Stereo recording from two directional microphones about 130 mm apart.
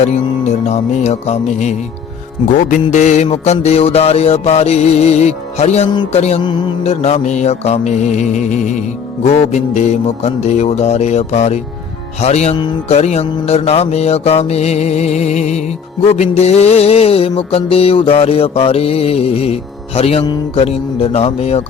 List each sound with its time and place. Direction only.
0.7 s music: 60° left (ahead or behind)
2.9 s music: 65° left (ahead or behind)
6.4 s speech: 40° left (ahead or behind)
6.8 s music: 55° left (ahead or behind)
9.2 s music: 55° left (ahead or behind)
20.2 s speech: 35° left (ahead or behind)
20.7 s music: 50° left (ahead or behind)